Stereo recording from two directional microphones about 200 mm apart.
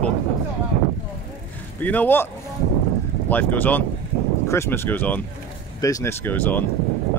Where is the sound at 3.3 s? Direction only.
10° left (ahead or behind).